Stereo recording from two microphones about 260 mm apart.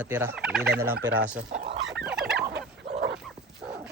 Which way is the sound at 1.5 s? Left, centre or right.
Right.